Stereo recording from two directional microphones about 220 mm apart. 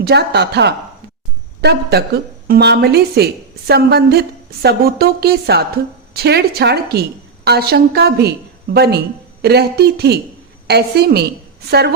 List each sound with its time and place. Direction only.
0.0 s a woman's voice: 50° right (ahead or behind)